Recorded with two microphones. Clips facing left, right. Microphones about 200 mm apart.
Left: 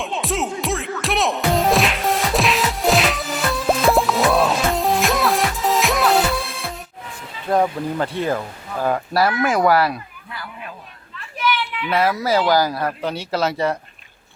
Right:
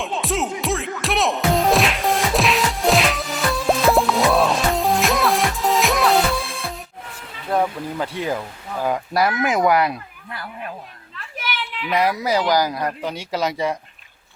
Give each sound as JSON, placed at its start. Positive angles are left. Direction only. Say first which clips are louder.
{"t": 0.0, "sound": "music", "louder": "even", "side_deg": 0}
{"t": 7.5, "sound": "speech", "louder": "left 3 dB", "side_deg": -10}
{"t": 11.9, "sound": "speech", "louder": "left 1 dB", "side_deg": -15}